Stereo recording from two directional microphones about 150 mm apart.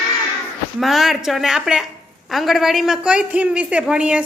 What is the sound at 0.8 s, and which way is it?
A woman's voice, centre (ahead or behind).